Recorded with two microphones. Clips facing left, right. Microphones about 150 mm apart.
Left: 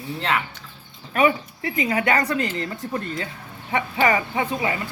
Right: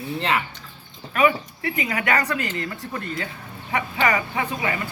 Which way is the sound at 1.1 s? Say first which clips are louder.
Even; 30° left (ahead or behind).